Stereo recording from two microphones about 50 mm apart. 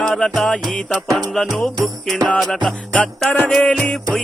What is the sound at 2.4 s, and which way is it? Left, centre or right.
Music, centre.